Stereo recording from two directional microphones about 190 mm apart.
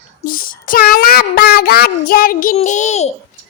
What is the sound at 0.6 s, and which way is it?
Child singing, 50° left (ahead or behind).